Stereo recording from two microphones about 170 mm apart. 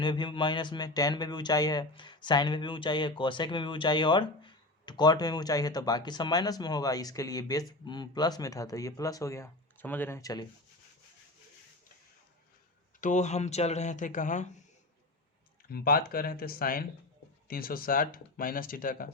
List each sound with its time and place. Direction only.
0.0 s speech: 25° left (ahead or behind)
13.0 s speech: 45° left (ahead or behind)
15.7 s speech: 60° left (ahead or behind)